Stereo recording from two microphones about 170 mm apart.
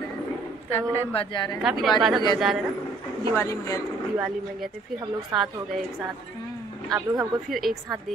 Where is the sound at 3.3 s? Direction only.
20° left (ahead or behind).